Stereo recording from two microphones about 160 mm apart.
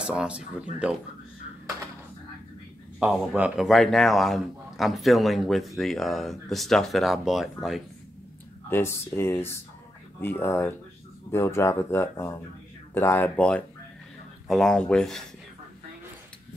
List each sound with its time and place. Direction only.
0.0 s speech: 5° right (ahead or behind)
3.0 s a man's voice: 5° right (ahead or behind)
8.6 s a man's voice: 15° left (ahead or behind)